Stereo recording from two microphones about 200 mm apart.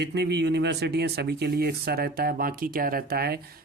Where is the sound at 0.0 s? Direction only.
55° right (ahead or behind).